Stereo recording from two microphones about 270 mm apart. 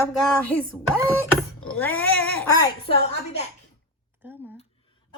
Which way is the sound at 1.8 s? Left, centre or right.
Centre.